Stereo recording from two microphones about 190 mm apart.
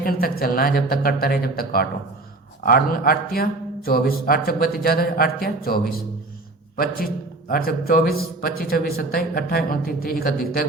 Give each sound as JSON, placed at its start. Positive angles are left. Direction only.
{"t": 0.0, "sound": "a man's voice", "side_deg": 50}